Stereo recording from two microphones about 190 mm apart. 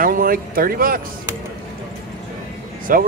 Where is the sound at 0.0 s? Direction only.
50° right (ahead or behind).